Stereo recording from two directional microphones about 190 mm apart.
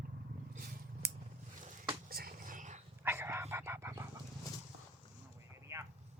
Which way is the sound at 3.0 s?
10° right (ahead or behind).